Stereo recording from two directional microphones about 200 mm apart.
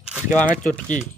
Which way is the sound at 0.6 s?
5° left (ahead or behind).